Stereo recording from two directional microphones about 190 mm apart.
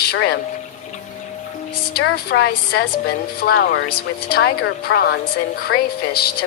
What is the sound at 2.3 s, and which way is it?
Speech, 80° left.